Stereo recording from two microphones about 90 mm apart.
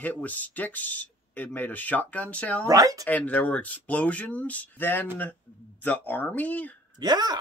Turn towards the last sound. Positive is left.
turn(degrees=-50)  # may be behind; listen again after turning